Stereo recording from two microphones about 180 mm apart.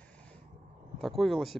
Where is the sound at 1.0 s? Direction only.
Centre (ahead or behind).